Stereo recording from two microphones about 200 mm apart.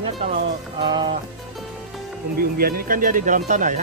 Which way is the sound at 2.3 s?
50° right (ahead or behind).